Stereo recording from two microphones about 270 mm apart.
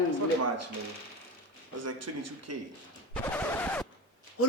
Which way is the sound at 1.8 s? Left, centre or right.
Right.